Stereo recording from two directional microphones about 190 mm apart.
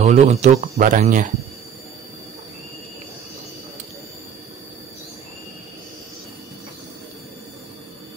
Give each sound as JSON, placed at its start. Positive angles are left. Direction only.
{"t": 0.0, "sound": "speech", "side_deg": -35}